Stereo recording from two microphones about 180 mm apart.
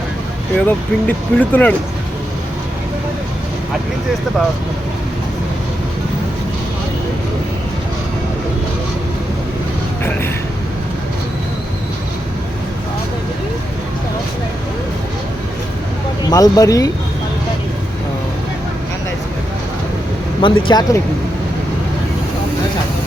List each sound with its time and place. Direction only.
0.5 s speech: 10° left (ahead or behind)
10.0 s a sound: 10° left (ahead or behind)
16.3 s speech: 20° left (ahead or behind)
20.4 s speech: 25° left (ahead or behind)